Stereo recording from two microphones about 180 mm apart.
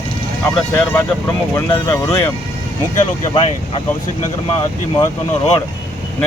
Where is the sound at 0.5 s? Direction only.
10° left (ahead or behind).